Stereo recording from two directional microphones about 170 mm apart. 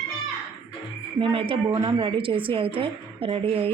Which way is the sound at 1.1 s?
30° right (ahead or behind).